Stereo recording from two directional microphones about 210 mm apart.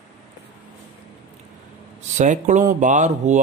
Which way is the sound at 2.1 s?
35° right (ahead or behind).